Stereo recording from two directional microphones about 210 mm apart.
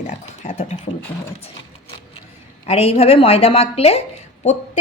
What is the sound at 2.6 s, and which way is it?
A woman's voice, 30° left (ahead or behind).